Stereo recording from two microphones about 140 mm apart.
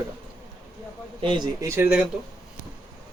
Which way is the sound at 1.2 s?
35° right (ahead or behind).